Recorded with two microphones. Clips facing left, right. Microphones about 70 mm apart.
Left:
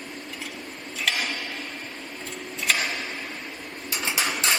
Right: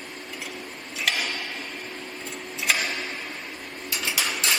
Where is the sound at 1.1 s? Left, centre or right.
Centre.